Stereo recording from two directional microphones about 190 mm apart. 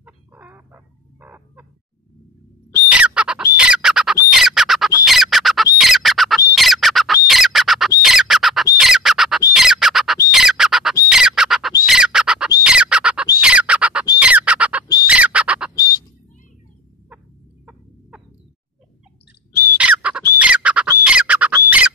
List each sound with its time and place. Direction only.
0.0 s a sound: 10° right (ahead or behind)
1.2 s fowl: 10° right (ahead or behind)
2.9 s squawk: 5° right (ahead or behind)
5.0 s bird: centre (ahead or behind)
5.8 s squawk: centre (ahead or behind)
6.5 s bird: centre (ahead or behind)
7.2 s squawk: centre (ahead or behind)
11.8 s bird: 5° right (ahead or behind)
12.6 s squawk: 5° right (ahead or behind)
15.0 s bird: 5° right (ahead or behind)
15.7 s a sound: 20° left (ahead or behind)
19.8 s bird: 5° right (ahead or behind)